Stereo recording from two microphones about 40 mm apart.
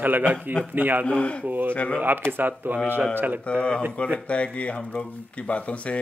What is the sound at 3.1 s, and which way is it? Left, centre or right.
Speech, right.